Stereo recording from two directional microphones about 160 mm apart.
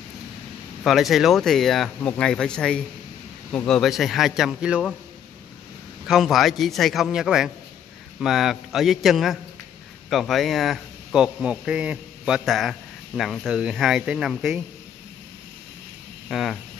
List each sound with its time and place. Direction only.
0.8 s a man's voice: centre (ahead or behind)
6.0 s a man's voice: centre (ahead or behind)
16.3 s speech: centre (ahead or behind)